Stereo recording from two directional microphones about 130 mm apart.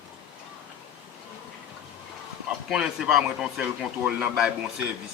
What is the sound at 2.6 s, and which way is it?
Speech, 5° right (ahead or behind).